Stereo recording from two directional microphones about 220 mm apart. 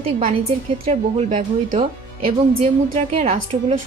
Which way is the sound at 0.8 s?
30° right (ahead or behind).